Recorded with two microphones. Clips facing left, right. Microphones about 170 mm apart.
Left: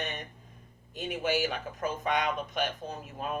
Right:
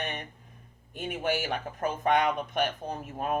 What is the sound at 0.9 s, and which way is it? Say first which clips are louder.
Speech: even; 55° right (ahead or behind).